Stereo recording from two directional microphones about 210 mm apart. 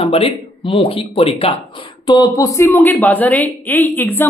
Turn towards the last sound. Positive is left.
turn(degrees=10)  # may be behind; listen again after turning